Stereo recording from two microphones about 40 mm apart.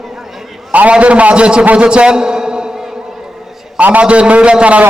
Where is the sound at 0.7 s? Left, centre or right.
Right.